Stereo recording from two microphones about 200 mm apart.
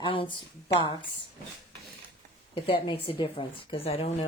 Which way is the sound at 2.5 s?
25° left (ahead or behind).